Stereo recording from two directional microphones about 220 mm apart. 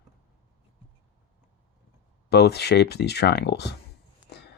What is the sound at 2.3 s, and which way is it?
Speech, 50° left (ahead or behind).